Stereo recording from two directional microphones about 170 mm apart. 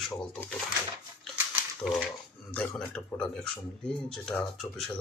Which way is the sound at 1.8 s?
Centre (ahead or behind).